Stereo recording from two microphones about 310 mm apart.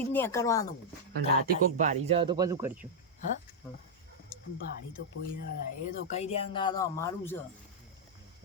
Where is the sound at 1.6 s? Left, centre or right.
Right.